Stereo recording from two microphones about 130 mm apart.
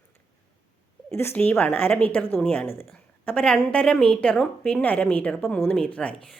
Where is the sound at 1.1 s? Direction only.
15° left (ahead or behind).